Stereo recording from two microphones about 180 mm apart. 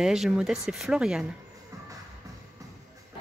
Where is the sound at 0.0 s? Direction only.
5° right (ahead or behind).